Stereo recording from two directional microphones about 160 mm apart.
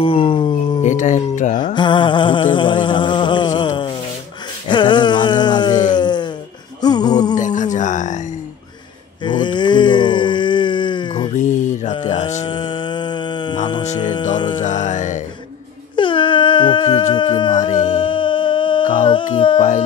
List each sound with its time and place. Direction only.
0.0 s a sound: 35° left (ahead or behind)
0.8 s speech: 50° left (ahead or behind)
1.6 s mantra: 30° left (ahead or behind)
4.6 s a sound: 30° left (ahead or behind)
7.3 s music: 50° left (ahead or behind)
9.2 s a sound: 30° left (ahead or behind)
11.3 s mantra: 50° left (ahead or behind)
12.4 s music: 30° left (ahead or behind)
14.6 s music: 50° left (ahead or behind)
16.0 s a sound: 30° left (ahead or behind)
17.1 s humming: 30° left (ahead or behind)
17.6 s music: 50° left (ahead or behind)
17.9 s music: 30° left (ahead or behind)